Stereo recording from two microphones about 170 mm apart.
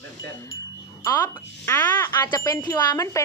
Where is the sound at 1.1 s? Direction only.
10° left (ahead or behind).